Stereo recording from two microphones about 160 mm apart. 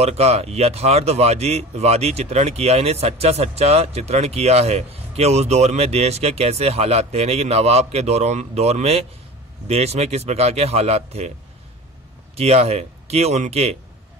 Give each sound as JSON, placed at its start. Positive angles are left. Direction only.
{"t": 0.0, "sound": "speech", "side_deg": -40}
{"t": 12.4, "sound": "speech", "side_deg": -40}